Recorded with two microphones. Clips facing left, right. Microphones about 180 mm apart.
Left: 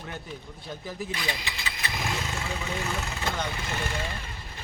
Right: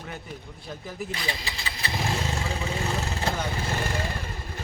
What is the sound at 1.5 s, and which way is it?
Vehicle, 35° right (ahead or behind).